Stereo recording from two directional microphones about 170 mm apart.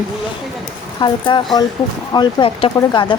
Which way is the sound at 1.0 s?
25° left (ahead or behind).